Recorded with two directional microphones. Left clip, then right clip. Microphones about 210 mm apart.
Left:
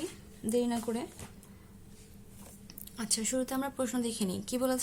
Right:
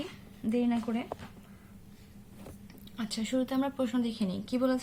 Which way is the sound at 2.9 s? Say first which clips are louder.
Even; 45° left (ahead or behind).